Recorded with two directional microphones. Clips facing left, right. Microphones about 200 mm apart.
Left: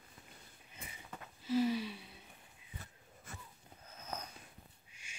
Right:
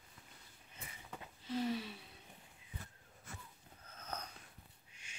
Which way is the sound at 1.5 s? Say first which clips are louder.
Left 5 dB; 5° left (ahead or behind).